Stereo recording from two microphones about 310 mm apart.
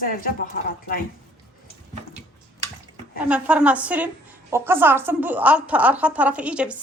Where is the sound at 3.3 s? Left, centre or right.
Centre.